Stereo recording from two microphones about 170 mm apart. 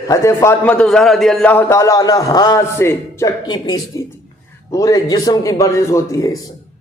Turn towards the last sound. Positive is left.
turn(degrees=20)  # may be behind; listen again after turning